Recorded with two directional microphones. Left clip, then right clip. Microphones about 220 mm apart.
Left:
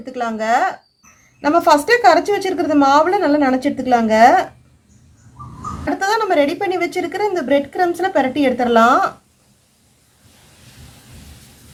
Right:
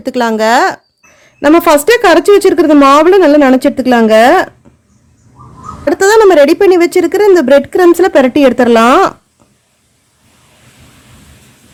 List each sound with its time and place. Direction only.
0.0 s speech: 50° right (ahead or behind)
6.0 s speech: 50° right (ahead or behind)